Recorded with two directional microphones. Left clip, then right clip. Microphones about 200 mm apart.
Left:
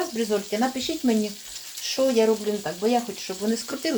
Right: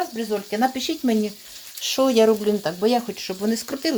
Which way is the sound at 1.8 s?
40° right (ahead or behind).